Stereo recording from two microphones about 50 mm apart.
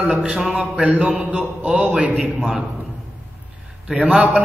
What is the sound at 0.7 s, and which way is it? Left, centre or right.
A man's voice, right.